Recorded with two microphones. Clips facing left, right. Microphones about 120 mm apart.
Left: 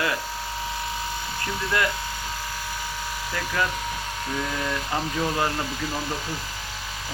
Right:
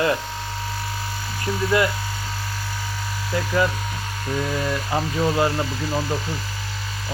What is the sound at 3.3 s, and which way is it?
Speech, 20° right (ahead or behind).